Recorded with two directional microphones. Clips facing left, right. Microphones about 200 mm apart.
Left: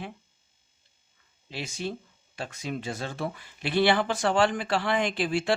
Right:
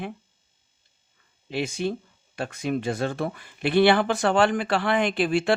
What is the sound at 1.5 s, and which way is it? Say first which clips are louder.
Speech: right 7 dB; 55° right (ahead or behind).